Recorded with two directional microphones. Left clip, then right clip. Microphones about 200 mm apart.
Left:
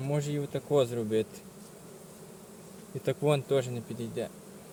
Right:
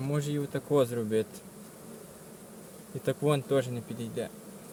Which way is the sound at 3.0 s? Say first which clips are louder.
Even; 5° right (ahead or behind).